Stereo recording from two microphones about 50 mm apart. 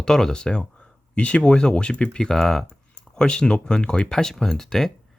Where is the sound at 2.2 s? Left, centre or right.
Centre.